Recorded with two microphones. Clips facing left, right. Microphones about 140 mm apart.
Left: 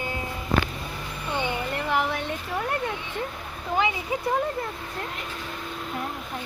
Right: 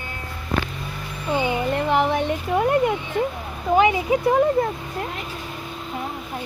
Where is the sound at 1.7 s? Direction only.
20° right (ahead or behind).